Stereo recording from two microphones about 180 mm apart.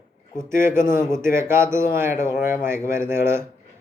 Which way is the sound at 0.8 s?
45° left (ahead or behind).